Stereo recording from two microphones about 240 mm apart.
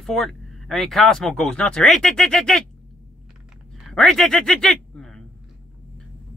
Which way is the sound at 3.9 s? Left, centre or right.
Centre.